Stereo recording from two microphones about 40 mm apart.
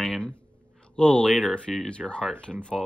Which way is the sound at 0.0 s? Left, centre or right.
Left.